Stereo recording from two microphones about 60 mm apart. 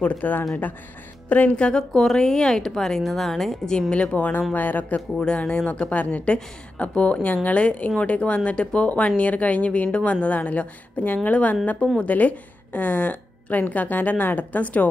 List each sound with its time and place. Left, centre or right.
0.0 s a woman's voice: left
1.7 s a woman's voice: centre
3.9 s a woman's voice: left
5.2 s a woman's voice: centre